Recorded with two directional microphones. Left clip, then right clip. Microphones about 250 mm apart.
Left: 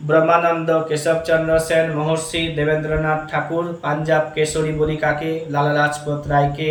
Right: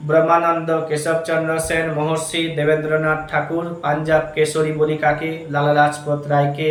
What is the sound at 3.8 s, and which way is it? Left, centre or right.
A man's voice, centre.